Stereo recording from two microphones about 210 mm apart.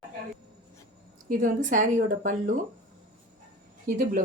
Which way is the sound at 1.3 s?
40° right (ahead or behind).